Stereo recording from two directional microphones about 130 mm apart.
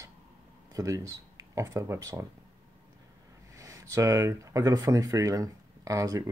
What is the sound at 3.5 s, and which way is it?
Speech, 25° right (ahead or behind).